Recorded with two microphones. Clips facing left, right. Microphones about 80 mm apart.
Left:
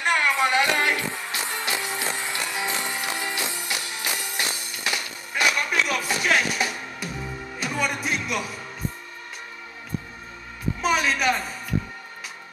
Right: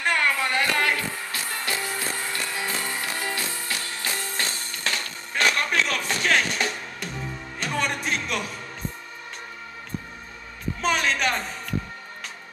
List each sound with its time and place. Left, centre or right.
0.0 s music: centre
10.8 s music: centre